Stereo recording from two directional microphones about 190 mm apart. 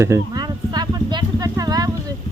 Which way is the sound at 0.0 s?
20° right (ahead or behind).